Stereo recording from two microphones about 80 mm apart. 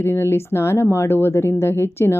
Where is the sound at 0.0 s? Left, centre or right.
Left.